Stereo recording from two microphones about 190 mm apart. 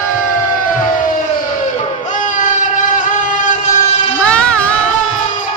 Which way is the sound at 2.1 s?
40° left (ahead or behind).